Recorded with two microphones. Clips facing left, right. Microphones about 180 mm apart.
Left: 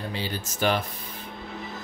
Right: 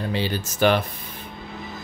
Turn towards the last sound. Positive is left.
turn(degrees=-70)  # may be behind; listen again after turning